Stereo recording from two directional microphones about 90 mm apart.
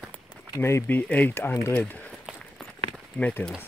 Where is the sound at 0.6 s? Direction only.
30° left (ahead or behind).